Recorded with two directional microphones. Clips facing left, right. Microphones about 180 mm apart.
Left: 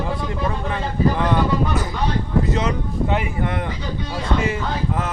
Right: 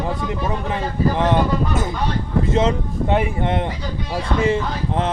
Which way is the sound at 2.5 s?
25° right (ahead or behind).